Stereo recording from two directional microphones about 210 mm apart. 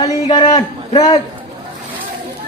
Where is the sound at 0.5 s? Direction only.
20° left (ahead or behind).